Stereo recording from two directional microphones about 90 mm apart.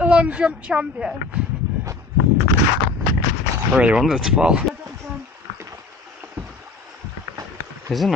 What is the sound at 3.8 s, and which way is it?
Speech, 10° right (ahead or behind).